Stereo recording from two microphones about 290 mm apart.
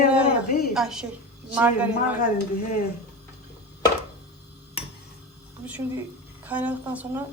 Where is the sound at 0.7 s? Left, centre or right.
Centre.